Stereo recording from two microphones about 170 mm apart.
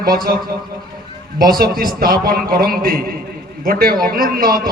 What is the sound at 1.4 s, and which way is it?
Speech, 60° right (ahead or behind).